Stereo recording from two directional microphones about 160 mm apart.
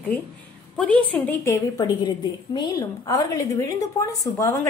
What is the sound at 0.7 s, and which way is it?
A woman's voice, 5° left (ahead or behind).